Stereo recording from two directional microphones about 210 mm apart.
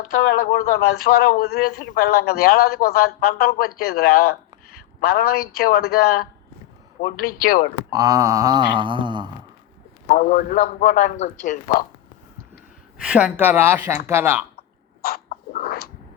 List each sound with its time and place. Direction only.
0.2 s speech: 45° left (ahead or behind)
7.3 s a man's voice: 40° left (ahead or behind)
7.9 s mantra: 15° right (ahead or behind)
10.1 s a man's voice: 40° left (ahead or behind)
13.1 s speech: 5° right (ahead or behind)
15.0 s a sound: 45° left (ahead or behind)